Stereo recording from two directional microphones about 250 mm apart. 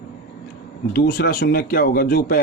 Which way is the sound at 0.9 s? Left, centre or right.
Left.